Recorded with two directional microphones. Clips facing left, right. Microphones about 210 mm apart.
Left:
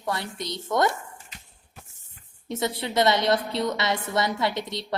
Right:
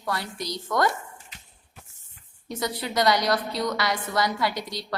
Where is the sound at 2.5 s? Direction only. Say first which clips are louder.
Left 2 dB; 25° left (ahead or behind).